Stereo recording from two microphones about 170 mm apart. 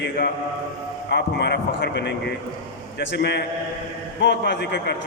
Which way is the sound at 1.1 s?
80° left.